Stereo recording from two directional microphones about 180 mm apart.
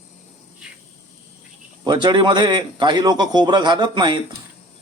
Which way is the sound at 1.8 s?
25° right (ahead or behind).